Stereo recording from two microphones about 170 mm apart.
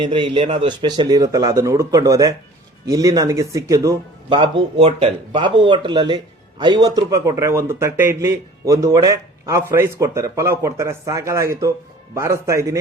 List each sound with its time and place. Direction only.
0.0 s a man's voice: 30° right (ahead or behind)